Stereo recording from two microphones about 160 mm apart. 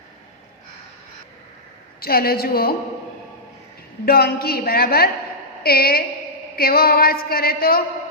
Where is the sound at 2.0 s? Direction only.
70° left (ahead or behind).